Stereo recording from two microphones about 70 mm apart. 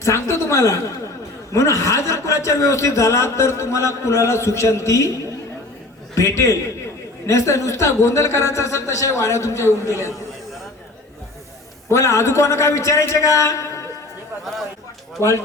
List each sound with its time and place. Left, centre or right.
0.0 s a man's voice: left
11.9 s a man's voice: left
15.2 s speech: left